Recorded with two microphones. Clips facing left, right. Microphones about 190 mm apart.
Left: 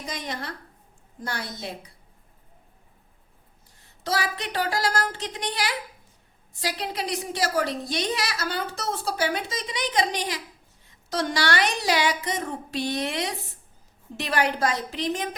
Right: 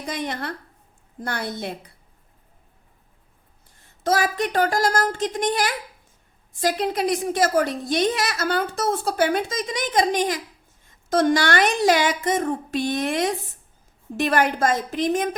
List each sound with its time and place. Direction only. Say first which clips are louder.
0.0 s a woman's voice: right 5 dB; 55° right (ahead or behind)
3.8 s a woman's voice: right 6 dB; 50° right (ahead or behind)